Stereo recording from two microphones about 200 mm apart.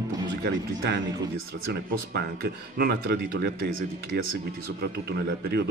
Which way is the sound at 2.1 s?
50° right (ahead or behind).